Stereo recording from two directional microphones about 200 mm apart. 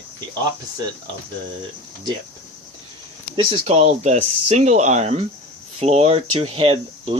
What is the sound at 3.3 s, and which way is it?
Speech, 25° right (ahead or behind).